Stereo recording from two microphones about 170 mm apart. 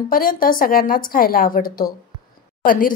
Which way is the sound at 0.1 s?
55° left (ahead or behind).